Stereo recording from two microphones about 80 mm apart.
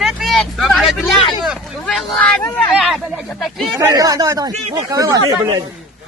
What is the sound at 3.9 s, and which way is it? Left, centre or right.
Speech, right.